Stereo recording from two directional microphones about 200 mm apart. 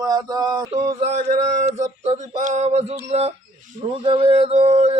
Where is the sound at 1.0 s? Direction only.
35° right (ahead or behind).